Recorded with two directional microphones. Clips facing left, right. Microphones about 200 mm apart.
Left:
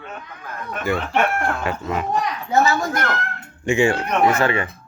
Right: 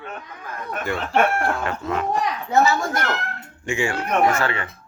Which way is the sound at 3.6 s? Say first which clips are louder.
Left 6 dB; 20° left (ahead or behind).